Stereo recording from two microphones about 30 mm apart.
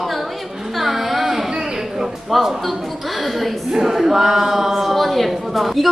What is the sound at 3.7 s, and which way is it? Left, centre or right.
A woman's voice, centre.